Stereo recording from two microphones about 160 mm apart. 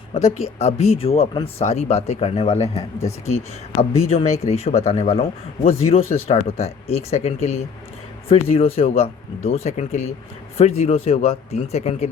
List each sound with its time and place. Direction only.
0.1 s speech: 40° left (ahead or behind)